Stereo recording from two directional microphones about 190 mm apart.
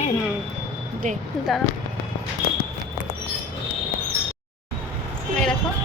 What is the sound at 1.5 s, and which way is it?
Speech, centre (ahead or behind).